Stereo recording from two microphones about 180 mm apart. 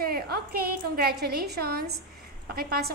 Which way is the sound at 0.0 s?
55° right (ahead or behind).